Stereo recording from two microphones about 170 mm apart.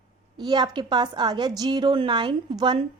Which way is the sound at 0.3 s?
25° right (ahead or behind).